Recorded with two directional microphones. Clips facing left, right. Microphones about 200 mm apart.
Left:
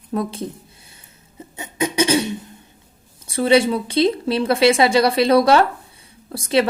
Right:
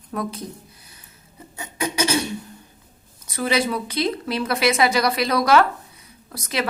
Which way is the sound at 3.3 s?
30° left (ahead or behind).